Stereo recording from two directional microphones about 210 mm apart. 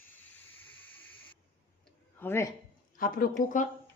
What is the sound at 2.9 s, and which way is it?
Speech, 40° left (ahead or behind).